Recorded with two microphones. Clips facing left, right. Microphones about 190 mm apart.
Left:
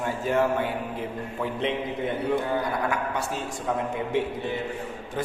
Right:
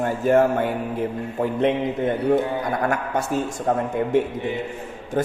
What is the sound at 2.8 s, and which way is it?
A man's voice, 45° right (ahead or behind).